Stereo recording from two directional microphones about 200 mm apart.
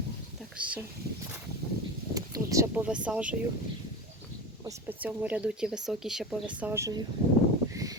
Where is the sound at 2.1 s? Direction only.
15° right (ahead or behind).